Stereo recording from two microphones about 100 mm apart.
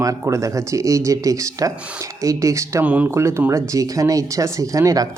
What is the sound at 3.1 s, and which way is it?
Speech, 25° right (ahead or behind).